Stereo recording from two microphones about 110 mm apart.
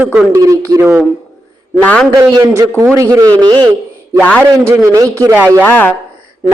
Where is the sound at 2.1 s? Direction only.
35° right (ahead or behind).